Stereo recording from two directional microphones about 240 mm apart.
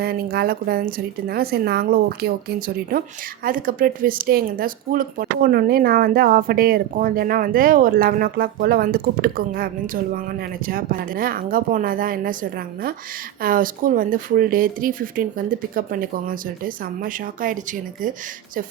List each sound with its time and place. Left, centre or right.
0.0 s a woman's voice: right